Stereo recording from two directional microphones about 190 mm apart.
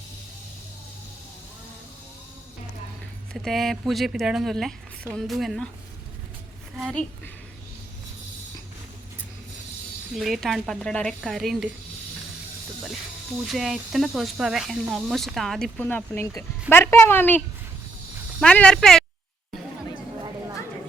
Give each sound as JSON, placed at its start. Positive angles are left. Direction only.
{"t": 3.3, "sound": "speech", "side_deg": 0}
{"t": 6.7, "sound": "a woman's voice", "side_deg": 0}
{"t": 10.2, "sound": "speech", "side_deg": 0}
{"t": 13.5, "sound": "speech", "side_deg": 0}